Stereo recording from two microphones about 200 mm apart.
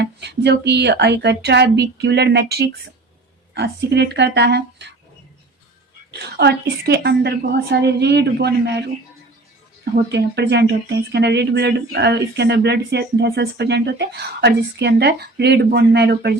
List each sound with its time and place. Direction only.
0.0 s speech: 55° right (ahead or behind)
6.1 s speech: 55° right (ahead or behind)
10.1 s speech: 60° right (ahead or behind)